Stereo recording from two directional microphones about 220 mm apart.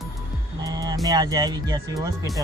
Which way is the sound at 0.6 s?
15° right (ahead or behind).